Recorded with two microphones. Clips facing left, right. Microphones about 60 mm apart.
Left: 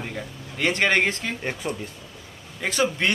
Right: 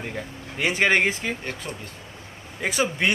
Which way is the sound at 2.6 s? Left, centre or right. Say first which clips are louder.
Left 1 dB; centre.